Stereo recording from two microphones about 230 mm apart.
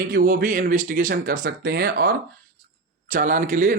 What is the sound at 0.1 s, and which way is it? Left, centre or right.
Speech, right.